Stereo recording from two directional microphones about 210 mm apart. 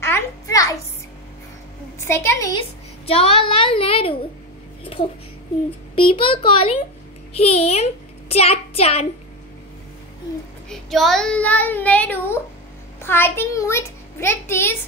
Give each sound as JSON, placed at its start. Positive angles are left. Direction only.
{"t": 0.0, "sound": "a sound", "side_deg": 15}
{"t": 2.0, "sound": "a child's voice", "side_deg": 10}
{"t": 3.1, "sound": "a child's voice", "side_deg": 25}
{"t": 5.9, "sound": "a child's voice", "side_deg": 25}
{"t": 10.7, "sound": "a child's voice", "side_deg": 0}